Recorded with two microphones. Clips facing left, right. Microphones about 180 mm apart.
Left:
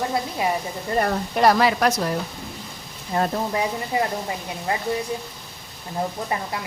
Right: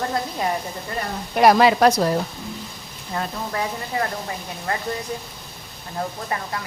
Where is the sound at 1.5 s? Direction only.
25° right (ahead or behind).